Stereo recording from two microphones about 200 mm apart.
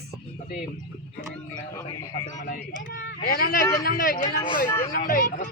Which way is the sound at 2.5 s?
50° left (ahead or behind).